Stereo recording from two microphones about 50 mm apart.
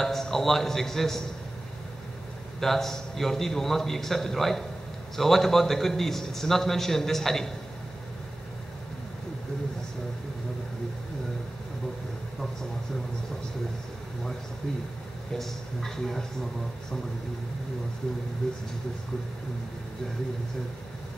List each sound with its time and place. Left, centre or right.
0.0 s a man's voice: centre
2.6 s a man's voice: centre
15.3 s a man's voice: centre